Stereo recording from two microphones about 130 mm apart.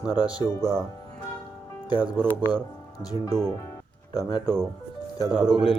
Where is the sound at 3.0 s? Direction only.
30° left (ahead or behind).